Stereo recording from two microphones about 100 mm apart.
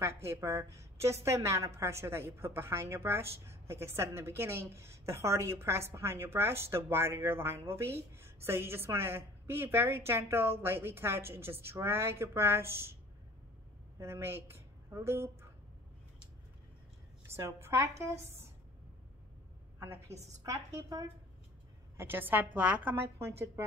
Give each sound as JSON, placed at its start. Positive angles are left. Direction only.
{"t": 0.0, "sound": "a woman's voice", "side_deg": -25}
{"t": 13.9, "sound": "a woman's voice", "side_deg": -25}
{"t": 17.4, "sound": "a woman's voice", "side_deg": -25}
{"t": 19.8, "sound": "a woman's voice", "side_deg": -25}
{"t": 20.4, "sound": "a woman's voice", "side_deg": -35}
{"t": 21.9, "sound": "a woman's voice", "side_deg": -20}
{"t": 23.0, "sound": "a woman's voice", "side_deg": -25}